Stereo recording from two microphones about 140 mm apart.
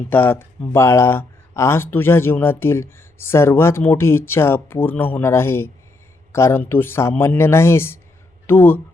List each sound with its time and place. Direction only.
0.1 s speech: 15° left (ahead or behind)